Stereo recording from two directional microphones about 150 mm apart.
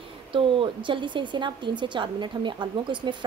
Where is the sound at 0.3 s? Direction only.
35° right (ahead or behind).